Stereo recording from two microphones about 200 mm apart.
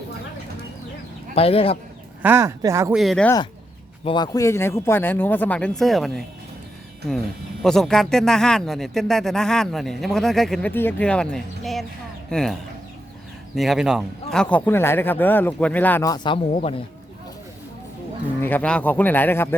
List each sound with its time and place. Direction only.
1.4 s speech: 30° left (ahead or behind)
2.2 s speech: 15° right (ahead or behind)
2.9 s a man's voice: centre (ahead or behind)
4.0 s speech: 20° left (ahead or behind); by 6.2 s centre (ahead or behind)
7.6 s a man's voice: centre (ahead or behind)
13.6 s speech: centre (ahead or behind); by 16.8 s 30° left (ahead or behind)
18.3 s speech: 10° left (ahead or behind)